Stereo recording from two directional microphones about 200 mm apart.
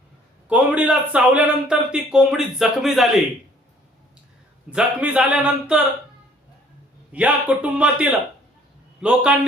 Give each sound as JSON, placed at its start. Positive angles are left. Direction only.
{"t": 0.4, "sound": "a man's voice", "side_deg": -5}
{"t": 4.7, "sound": "a man's voice", "side_deg": -5}
{"t": 7.1, "sound": "a man's voice", "side_deg": -5}